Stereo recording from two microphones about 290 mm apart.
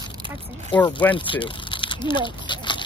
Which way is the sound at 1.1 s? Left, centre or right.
Centre.